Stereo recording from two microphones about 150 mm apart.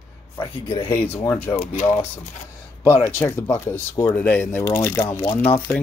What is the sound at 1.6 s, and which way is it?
Speech, 55° left (ahead or behind).